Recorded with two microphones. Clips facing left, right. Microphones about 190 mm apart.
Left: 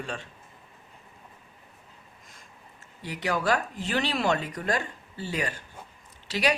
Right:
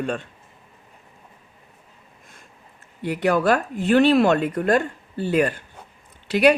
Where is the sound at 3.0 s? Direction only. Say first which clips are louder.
Right 8 dB; 55° right (ahead or behind).